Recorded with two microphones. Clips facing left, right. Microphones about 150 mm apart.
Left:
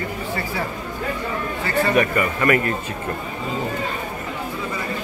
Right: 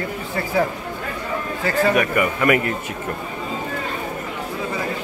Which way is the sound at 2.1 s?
15° right (ahead or behind).